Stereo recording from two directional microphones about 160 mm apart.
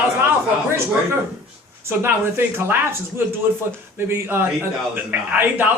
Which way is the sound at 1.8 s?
15° right (ahead or behind).